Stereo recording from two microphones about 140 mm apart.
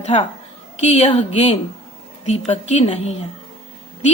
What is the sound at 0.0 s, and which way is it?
A woman's voice, 55° left (ahead or behind).